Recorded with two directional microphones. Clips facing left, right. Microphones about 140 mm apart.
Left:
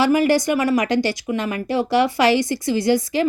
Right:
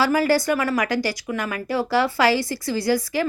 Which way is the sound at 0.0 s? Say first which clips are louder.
Left 3 dB; 20° left (ahead or behind).